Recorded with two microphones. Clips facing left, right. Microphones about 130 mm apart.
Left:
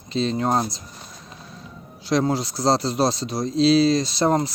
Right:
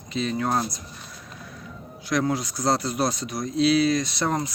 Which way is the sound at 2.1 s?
30° left (ahead or behind).